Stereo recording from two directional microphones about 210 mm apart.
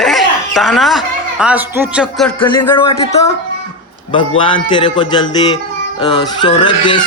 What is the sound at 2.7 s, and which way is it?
Speech, 30° left (ahead or behind).